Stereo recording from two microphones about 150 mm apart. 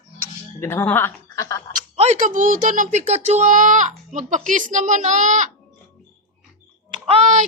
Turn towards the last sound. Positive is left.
turn(degrees=-50)  # may be behind; listen again after turning